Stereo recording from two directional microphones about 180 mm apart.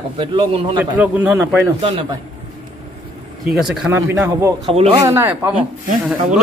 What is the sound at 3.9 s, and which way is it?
Speech, 15° right (ahead or behind).